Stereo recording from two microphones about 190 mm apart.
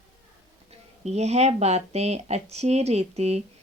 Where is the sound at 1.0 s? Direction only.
35° right (ahead or behind).